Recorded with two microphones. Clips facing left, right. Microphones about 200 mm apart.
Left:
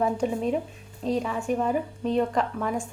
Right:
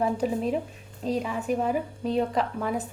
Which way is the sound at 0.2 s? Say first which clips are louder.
Left 1 dB; centre (ahead or behind).